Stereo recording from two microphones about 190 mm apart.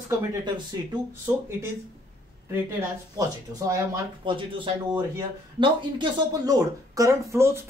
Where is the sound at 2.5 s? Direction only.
10° right (ahead or behind).